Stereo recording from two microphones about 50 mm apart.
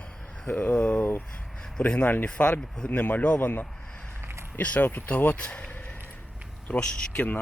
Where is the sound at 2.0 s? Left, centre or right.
Left.